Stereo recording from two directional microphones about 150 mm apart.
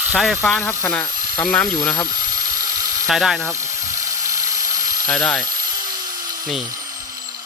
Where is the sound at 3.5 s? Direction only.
20° right (ahead or behind).